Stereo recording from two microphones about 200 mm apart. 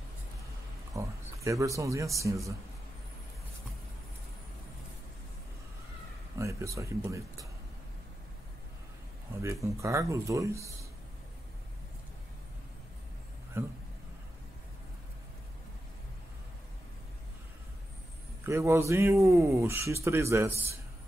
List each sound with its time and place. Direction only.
0.9 s speech: 15° right (ahead or behind)
6.3 s speech: 15° right (ahead or behind)
9.4 s speech: 15° right (ahead or behind)
13.5 s speech: 10° right (ahead or behind)
18.4 s speech: 15° right (ahead or behind)